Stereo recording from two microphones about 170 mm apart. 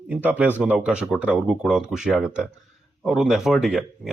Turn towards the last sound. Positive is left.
turn(degrees=0)  # may be behind; listen again after turning